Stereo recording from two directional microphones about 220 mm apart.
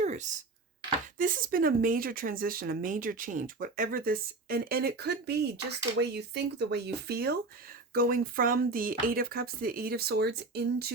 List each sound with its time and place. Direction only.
0.0 s computer keyboard: 35° right (ahead or behind)
1.2 s speech: 40° right (ahead or behind)